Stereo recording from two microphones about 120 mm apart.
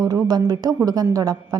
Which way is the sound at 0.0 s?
35° right (ahead or behind).